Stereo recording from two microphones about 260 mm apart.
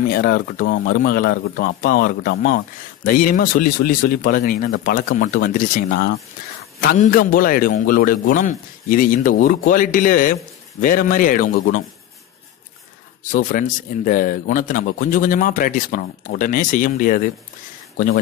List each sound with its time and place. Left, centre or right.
0.1 s speech: left
13.2 s speech: left